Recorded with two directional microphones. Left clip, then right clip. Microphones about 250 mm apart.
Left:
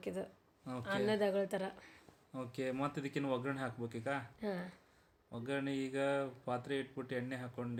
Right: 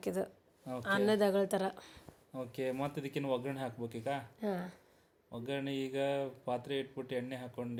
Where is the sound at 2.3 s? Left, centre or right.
Centre.